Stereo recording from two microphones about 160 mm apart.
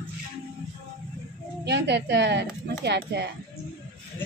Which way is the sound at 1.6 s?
90° right.